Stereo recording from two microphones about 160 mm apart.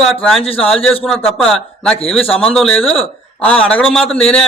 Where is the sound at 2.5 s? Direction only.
Centre (ahead or behind).